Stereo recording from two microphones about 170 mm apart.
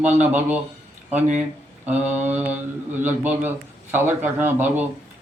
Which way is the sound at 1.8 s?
10° right (ahead or behind).